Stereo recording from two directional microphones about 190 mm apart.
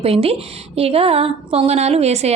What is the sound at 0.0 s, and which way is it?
A woman's voice, 30° right (ahead or behind).